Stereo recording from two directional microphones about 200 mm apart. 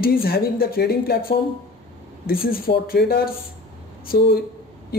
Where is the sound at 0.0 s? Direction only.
50° left (ahead or behind).